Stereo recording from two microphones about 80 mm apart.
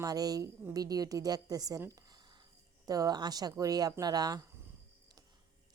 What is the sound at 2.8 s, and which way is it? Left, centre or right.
A woman's voice, right.